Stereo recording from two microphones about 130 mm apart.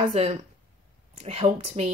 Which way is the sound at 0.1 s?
50° right (ahead or behind).